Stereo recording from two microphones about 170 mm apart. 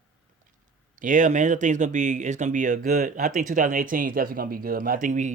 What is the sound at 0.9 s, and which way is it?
Speech, 50° right (ahead or behind).